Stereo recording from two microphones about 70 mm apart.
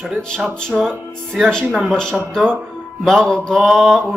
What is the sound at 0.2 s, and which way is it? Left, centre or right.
Speech, centre.